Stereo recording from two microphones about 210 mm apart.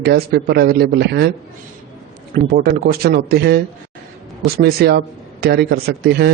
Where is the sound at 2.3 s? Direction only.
45° right (ahead or behind).